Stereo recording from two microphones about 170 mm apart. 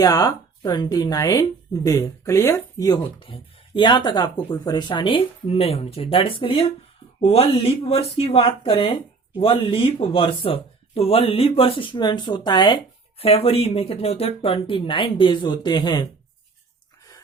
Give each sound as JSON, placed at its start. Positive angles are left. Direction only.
{"t": 0.0, "sound": "speech", "side_deg": 20}